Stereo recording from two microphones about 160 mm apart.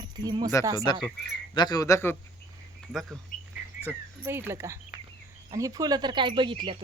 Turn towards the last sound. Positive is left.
turn(degrees=-30)  # may be behind; listen again after turning